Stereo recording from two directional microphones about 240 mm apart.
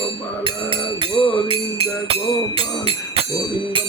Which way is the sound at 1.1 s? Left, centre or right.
Centre.